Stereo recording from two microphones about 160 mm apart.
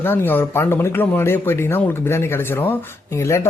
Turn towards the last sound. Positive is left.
turn(degrees=15)  # may be behind; listen again after turning